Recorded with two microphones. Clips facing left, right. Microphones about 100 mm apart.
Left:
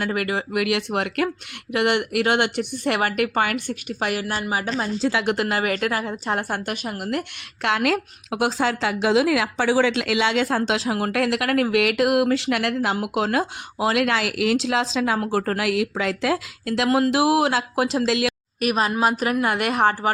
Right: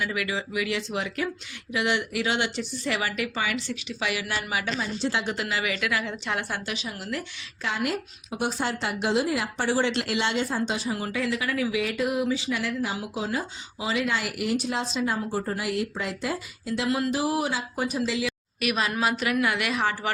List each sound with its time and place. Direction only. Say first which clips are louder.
0.0 s speech: left 5 dB; 50° left (ahead or behind)
4.8 s a woman's voice: left 5 dB; 60° left (ahead or behind); by 18.3 s 90° left
18.6 s a woman's voice: left 5 dB; 40° left (ahead or behind)